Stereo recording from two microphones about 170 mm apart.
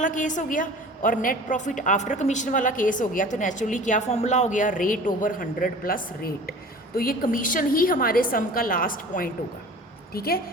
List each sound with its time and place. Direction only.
0.0 s a woman's voice: 50° left (ahead or behind)